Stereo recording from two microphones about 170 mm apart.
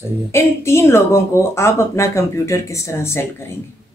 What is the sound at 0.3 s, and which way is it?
Speech, 15° left (ahead or behind).